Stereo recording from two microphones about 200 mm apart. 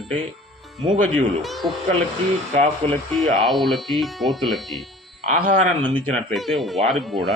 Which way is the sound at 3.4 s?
Centre (ahead or behind).